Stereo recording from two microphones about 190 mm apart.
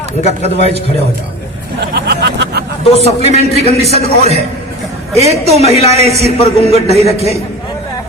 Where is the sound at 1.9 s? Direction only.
60° right (ahead or behind).